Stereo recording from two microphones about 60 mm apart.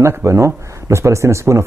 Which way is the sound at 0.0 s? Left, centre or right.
Right.